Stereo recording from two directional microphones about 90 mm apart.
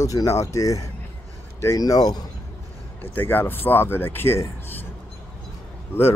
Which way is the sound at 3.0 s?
20° left (ahead or behind).